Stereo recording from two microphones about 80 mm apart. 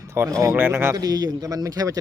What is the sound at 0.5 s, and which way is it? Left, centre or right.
Speech, right.